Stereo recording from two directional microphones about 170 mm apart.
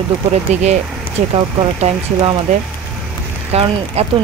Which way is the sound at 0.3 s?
40° right (ahead or behind).